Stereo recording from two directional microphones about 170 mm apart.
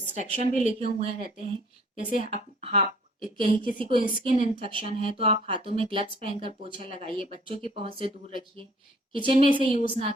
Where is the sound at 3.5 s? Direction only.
55° left (ahead or behind).